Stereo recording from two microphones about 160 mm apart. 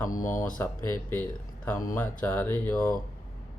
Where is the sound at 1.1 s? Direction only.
10° left (ahead or behind).